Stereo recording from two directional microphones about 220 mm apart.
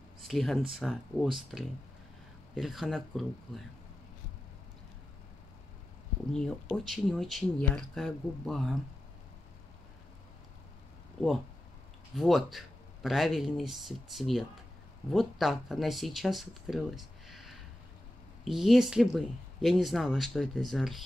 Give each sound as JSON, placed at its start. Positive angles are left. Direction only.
{"t": 0.2, "sound": "speech", "side_deg": 0}
{"t": 6.3, "sound": "speech", "side_deg": 5}
{"t": 12.2, "sound": "speech", "side_deg": 0}